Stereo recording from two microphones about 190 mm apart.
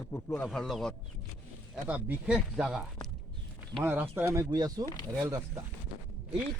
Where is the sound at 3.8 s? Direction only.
10° right (ahead or behind).